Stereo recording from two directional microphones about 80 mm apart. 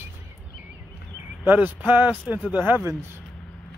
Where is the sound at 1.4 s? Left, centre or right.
Right.